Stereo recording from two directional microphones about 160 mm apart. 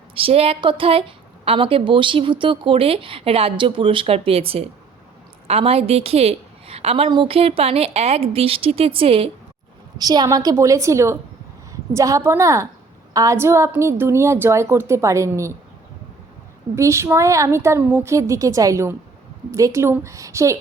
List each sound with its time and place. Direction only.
0.1 s a woman's voice: 35° right (ahead or behind)
10.0 s a woman's voice: 25° right (ahead or behind)
16.7 s a woman's voice: 15° right (ahead or behind)